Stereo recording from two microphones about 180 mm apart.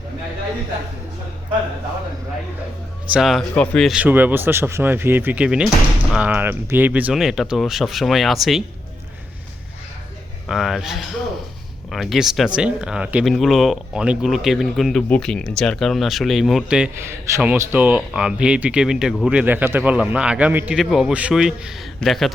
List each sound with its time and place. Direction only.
3.1 s speech: centre (ahead or behind)
10.5 s speech: centre (ahead or behind)